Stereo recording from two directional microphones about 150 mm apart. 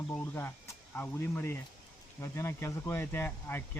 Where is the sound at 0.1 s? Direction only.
15° left (ahead or behind).